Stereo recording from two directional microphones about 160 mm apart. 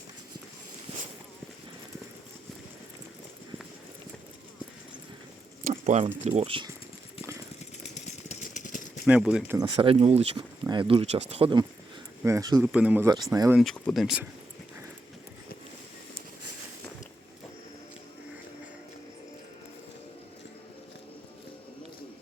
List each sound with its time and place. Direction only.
5.6 s a sound: 50° right (ahead or behind)
6.4 s speech: 35° right (ahead or behind)
7.9 s a sound: 50° left (ahead or behind)
9.0 s speech: 5° right (ahead or behind)
9.6 s speech: 20° right (ahead or behind)
9.8 s speech: 40° right (ahead or behind)
10.3 s speech: 25° right (ahead or behind)
12.2 s speech: 20° right (ahead or behind)
12.6 s speech: 5° right (ahead or behind)
13.1 s speech: 25° right (ahead or behind)
13.6 s speech: centre (ahead or behind)